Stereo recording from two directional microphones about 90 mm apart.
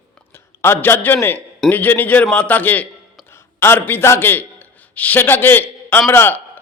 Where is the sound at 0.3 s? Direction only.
25° left (ahead or behind).